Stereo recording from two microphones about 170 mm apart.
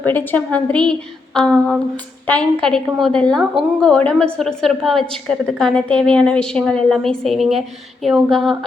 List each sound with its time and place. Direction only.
0.0 s a woman's voice: 10° left (ahead or behind)